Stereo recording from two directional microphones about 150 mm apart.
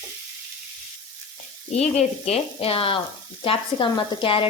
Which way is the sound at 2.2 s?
40° left (ahead or behind).